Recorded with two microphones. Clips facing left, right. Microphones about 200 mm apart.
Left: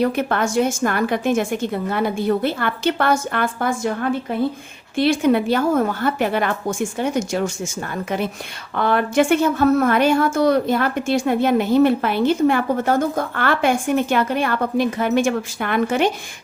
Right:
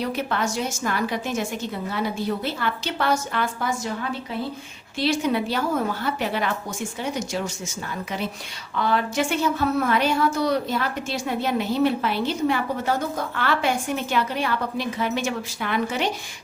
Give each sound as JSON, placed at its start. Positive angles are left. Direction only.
{"t": 0.0, "sound": "a woman's voice", "side_deg": 55}
{"t": 8.7, "sound": "a woman's voice", "side_deg": 55}